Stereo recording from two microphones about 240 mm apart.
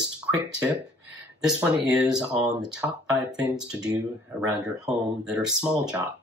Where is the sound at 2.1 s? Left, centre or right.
Centre.